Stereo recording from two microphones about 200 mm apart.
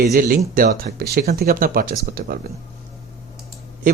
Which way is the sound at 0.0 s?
45° right (ahead or behind).